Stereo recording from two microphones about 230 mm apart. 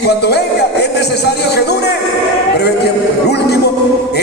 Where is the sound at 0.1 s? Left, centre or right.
Left.